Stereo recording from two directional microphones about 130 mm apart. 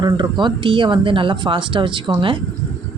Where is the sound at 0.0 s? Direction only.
35° right (ahead or behind).